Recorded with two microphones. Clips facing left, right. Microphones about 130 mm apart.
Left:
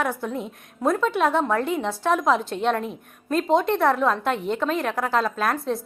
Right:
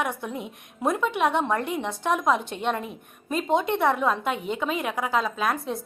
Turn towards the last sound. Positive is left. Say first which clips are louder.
# left 2 dB
turn(degrees=0)  # may be behind; listen again after turning